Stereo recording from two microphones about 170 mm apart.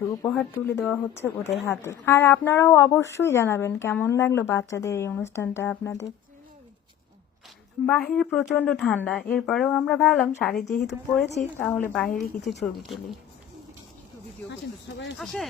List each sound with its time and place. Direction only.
0.3 s speech: 10° left (ahead or behind)
7.9 s speech: 5° left (ahead or behind)
14.9 s speech: 90° left
15.2 s speech: centre (ahead or behind)